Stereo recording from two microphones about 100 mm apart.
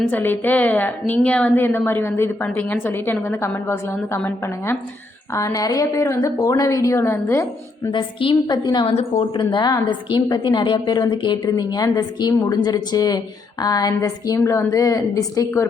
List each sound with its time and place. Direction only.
0.1 s a woman's voice: 20° left (ahead or behind)
5.3 s a woman's voice: 35° left (ahead or behind)
7.9 s a woman's voice: 55° left (ahead or behind)
8.9 s a woman's voice: 90° left
9.3 s a woman's voice: 50° left (ahead or behind)